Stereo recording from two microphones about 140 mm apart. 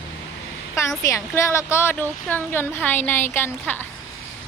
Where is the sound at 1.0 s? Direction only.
20° left (ahead or behind).